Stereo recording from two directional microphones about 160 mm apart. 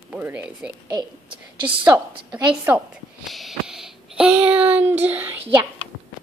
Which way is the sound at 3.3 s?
Centre (ahead or behind).